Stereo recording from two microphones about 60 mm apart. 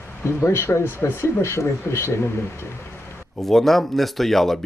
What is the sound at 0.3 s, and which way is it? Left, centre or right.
Speech, left.